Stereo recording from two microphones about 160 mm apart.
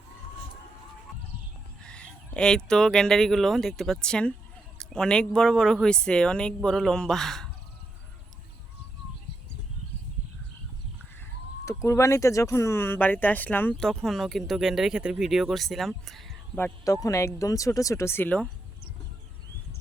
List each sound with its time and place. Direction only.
1.8 s speech: 5° left (ahead or behind)
11.6 s speech: 20° left (ahead or behind); by 16.4 s centre (ahead or behind)
16.6 s speech: 15° left (ahead or behind)